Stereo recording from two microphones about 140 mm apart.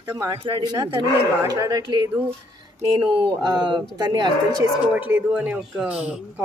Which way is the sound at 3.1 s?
30° right (ahead or behind).